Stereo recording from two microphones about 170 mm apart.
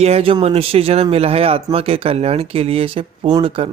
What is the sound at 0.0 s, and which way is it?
Speech, 35° right (ahead or behind).